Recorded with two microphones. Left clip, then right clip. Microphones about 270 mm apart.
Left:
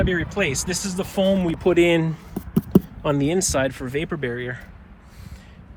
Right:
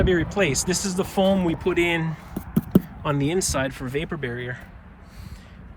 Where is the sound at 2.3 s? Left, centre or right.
Left.